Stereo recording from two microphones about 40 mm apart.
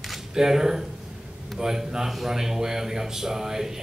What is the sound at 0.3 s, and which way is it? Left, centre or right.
A man's voice, centre.